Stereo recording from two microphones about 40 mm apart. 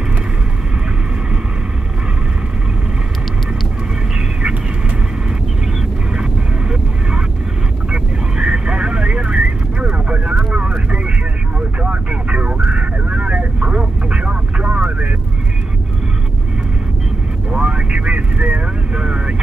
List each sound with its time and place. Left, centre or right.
6.7 s vehicle: right
17.5 s vehicle: right